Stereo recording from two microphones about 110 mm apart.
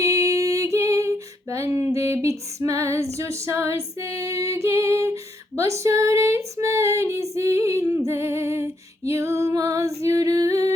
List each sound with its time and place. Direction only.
0.3 s female singing: 30° right (ahead or behind)